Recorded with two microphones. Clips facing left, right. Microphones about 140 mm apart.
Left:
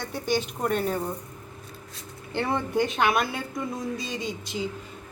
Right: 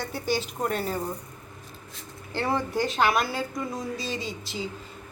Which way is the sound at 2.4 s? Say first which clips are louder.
Even; 5° right (ahead or behind).